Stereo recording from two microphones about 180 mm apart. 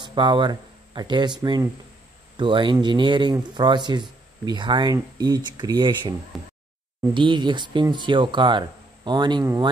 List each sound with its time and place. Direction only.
0.0 s speech: 25° right (ahead or behind)
6.3 s speech: centre (ahead or behind)
7.2 s speech: 25° right (ahead or behind)